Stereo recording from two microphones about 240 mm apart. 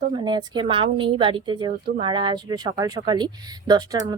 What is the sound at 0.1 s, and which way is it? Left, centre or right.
A woman's voice, centre.